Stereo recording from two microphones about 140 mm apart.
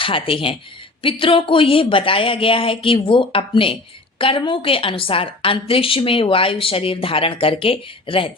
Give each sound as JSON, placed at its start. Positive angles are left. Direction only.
{"t": 0.0, "sound": "a woman's voice", "side_deg": 40}